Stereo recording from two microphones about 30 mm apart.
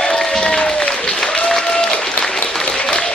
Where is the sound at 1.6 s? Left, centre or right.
Centre.